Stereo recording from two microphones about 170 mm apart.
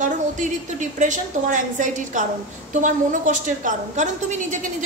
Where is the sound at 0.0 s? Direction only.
45° right (ahead or behind).